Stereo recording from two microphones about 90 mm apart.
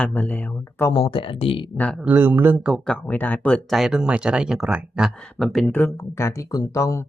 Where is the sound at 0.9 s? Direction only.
80° left.